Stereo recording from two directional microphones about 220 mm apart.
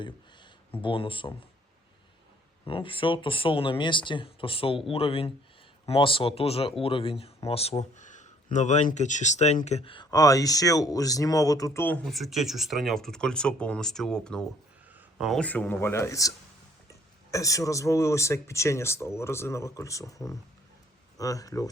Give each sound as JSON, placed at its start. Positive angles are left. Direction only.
{"t": 0.8, "sound": "speech", "side_deg": 25}
{"t": 2.6, "sound": "speech", "side_deg": 25}
{"t": 17.3, "sound": "speech", "side_deg": 15}